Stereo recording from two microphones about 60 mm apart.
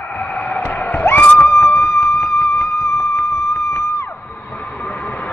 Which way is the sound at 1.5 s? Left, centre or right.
Left.